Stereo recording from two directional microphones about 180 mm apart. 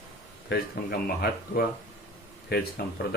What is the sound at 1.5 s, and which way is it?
Speech, 60° left (ahead or behind).